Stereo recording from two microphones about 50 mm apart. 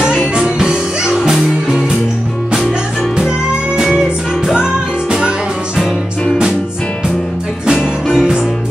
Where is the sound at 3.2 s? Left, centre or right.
Centre.